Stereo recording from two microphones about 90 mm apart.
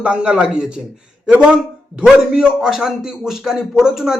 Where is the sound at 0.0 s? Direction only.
10° right (ahead or behind).